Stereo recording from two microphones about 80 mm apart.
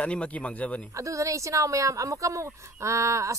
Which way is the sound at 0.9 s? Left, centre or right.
Right.